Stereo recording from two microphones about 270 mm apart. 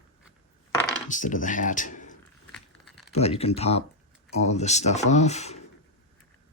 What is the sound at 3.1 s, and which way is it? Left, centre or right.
Speech, left.